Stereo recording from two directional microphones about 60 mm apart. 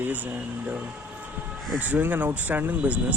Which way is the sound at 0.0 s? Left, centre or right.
Right.